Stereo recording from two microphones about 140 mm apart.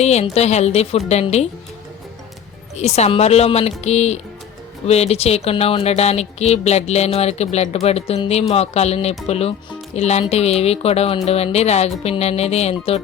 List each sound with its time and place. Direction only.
0.0 s speech: 50° left (ahead or behind)
2.7 s speech: 50° left (ahead or behind)